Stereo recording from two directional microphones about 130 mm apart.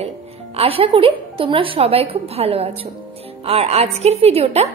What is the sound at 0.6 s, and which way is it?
A woman's voice, 45° right (ahead or behind).